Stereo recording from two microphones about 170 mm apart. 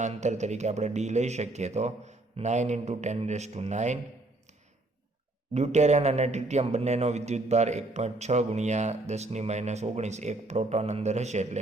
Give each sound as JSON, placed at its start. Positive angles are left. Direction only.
{"t": 0.0, "sound": "speech", "side_deg": -45}
{"t": 5.5, "sound": "speech", "side_deg": -40}